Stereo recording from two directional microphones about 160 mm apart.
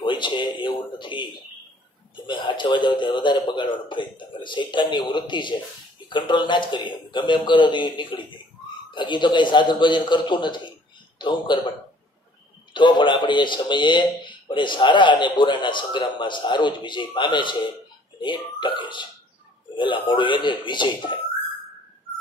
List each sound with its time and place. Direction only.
0.0 s a man's voice: 30° left (ahead or behind)
12.7 s a man's voice: 30° left (ahead or behind)